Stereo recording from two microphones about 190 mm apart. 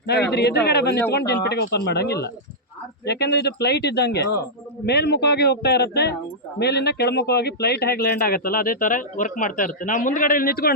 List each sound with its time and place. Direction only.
0.3 s speech: 60° left (ahead or behind)